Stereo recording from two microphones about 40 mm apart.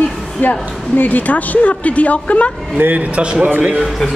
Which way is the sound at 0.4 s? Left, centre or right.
Left.